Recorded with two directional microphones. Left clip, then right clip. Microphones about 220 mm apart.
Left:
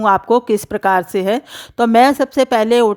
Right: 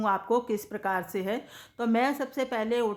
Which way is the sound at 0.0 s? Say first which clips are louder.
Left 13 dB; 40° left (ahead or behind).